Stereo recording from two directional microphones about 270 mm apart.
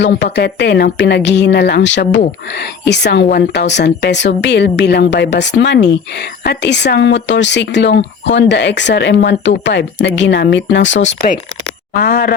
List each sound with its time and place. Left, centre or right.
0.0 s speech: left